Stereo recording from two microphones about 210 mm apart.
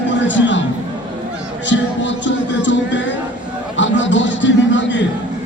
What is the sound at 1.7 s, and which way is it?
Music, 60° left (ahead or behind).